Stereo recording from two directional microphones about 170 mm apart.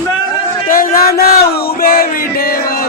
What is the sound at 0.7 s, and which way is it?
Music, 55° left (ahead or behind).